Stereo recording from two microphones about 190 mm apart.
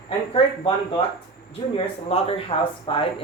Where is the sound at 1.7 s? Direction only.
30° left (ahead or behind).